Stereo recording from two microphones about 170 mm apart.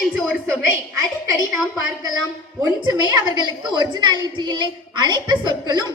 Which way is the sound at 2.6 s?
25° right (ahead or behind).